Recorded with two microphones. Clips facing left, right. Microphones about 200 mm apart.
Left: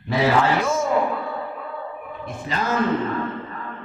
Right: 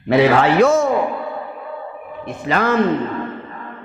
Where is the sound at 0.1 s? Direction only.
65° right (ahead or behind).